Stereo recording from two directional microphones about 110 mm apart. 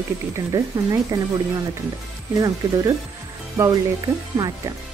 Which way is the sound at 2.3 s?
30° right (ahead or behind).